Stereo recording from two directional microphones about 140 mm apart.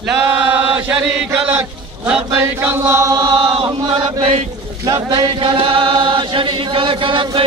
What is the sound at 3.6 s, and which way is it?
Speech, 40° right (ahead or behind).